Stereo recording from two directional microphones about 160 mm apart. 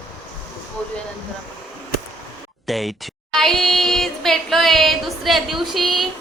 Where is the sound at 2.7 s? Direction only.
Centre (ahead or behind).